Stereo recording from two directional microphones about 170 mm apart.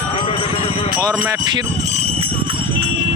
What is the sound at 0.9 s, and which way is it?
Speech, 25° right (ahead or behind).